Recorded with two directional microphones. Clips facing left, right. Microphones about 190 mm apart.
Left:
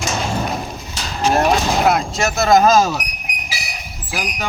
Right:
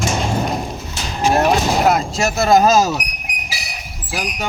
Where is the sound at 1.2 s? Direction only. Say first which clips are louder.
Right 1 dB; 5° right (ahead or behind).